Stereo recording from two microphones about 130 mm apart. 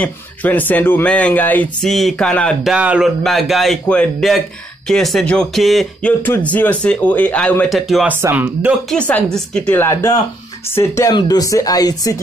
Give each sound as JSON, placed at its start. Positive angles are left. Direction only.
{"t": 0.0, "sound": "speech", "side_deg": 15}
{"t": 2.7, "sound": "speech", "side_deg": -10}
{"t": 6.2, "sound": "speech", "side_deg": 15}
{"t": 7.7, "sound": "speech", "side_deg": 0}
{"t": 8.1, "sound": "speech", "side_deg": -15}
{"t": 8.9, "sound": "speech", "side_deg": 10}
{"t": 9.8, "sound": "speech", "side_deg": 25}